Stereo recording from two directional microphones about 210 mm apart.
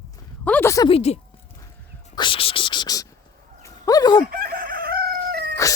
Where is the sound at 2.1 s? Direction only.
25° left (ahead or behind).